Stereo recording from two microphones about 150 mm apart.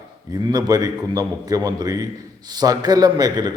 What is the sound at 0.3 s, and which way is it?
A man's voice, 25° right (ahead or behind).